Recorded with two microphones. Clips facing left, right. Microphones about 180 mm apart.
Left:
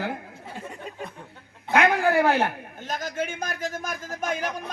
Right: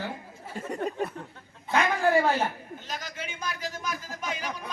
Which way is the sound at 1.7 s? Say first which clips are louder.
Left 3 dB; 65° left (ahead or behind).